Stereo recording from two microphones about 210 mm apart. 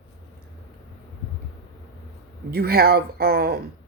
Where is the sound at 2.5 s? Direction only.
45° right (ahead or behind).